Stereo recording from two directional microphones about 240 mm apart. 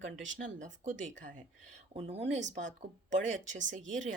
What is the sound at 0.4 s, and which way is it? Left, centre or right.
Speech, right.